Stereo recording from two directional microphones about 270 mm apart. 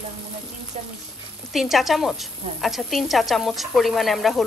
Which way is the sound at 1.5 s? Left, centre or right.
Centre.